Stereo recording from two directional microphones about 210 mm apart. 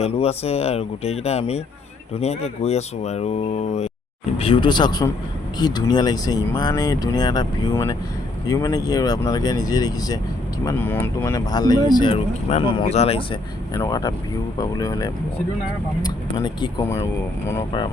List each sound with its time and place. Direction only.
0.0 s speech: 30° left (ahead or behind)